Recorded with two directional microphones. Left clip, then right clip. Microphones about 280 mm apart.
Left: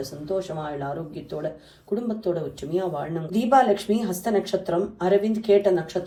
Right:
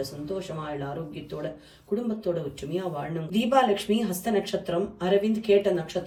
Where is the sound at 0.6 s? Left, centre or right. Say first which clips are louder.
Left 3 dB; centre.